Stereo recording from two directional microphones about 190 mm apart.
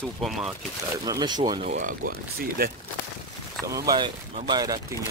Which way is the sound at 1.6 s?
45° right (ahead or behind).